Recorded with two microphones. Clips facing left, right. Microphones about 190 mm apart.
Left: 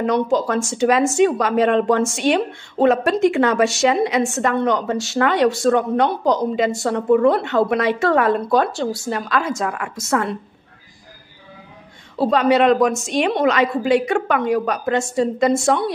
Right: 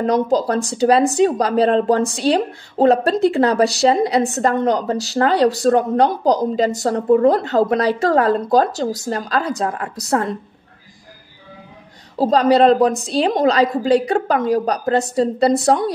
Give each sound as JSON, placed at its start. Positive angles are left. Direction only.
{"t": 0.0, "sound": "a woman's voice", "side_deg": -40}
{"t": 12.2, "sound": "a woman's voice", "side_deg": -40}